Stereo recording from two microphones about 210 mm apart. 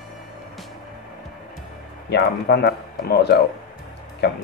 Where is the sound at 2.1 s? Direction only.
50° left (ahead or behind).